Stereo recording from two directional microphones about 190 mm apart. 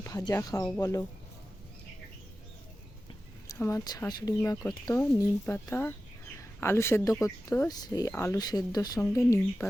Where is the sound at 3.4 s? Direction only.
15° left (ahead or behind).